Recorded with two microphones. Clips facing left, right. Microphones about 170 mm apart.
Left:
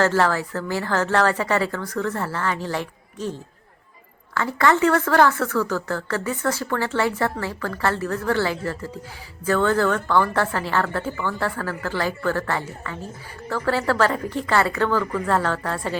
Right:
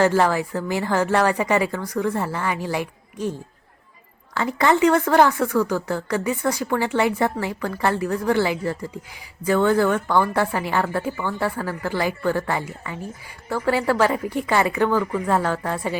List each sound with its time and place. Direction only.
0.0 s speech: 15° right (ahead or behind)
4.4 s speech: 20° right (ahead or behind)